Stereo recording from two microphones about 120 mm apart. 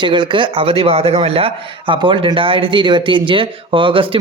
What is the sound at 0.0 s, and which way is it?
Speech, 40° right (ahead or behind).